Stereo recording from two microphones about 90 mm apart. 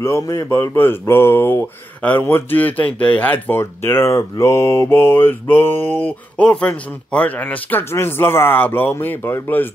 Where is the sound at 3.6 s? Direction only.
30° left (ahead or behind).